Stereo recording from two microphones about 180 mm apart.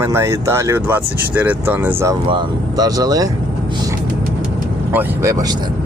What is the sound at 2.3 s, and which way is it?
Speech, 25° right (ahead or behind).